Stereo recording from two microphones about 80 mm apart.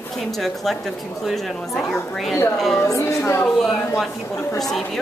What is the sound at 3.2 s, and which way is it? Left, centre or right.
Speech, left.